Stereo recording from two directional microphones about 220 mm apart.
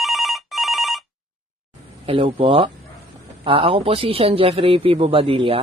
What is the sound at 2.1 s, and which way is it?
A man's voice, 25° right (ahead or behind).